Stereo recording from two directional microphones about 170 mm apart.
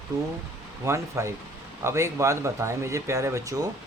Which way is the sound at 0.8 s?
15° right (ahead or behind).